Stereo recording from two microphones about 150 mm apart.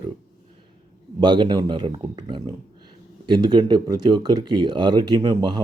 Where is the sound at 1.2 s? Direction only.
30° right (ahead or behind).